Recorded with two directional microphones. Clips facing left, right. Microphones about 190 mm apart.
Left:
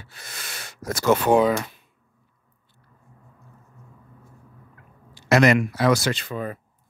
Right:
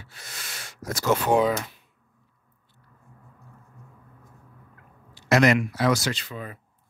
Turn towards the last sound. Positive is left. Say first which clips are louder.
# left 5 dB
turn(degrees=50)  # may be behind; listen again after turning